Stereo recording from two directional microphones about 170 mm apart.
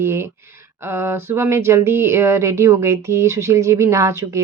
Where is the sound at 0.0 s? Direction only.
15° right (ahead or behind).